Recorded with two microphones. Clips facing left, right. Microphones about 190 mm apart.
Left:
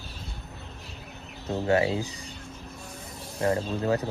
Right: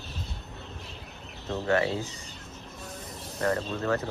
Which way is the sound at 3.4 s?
20° left (ahead or behind).